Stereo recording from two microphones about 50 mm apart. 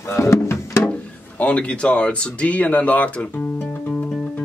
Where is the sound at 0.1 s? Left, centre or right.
Left.